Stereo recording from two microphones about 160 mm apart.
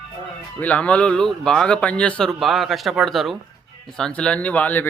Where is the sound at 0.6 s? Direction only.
10° left (ahead or behind).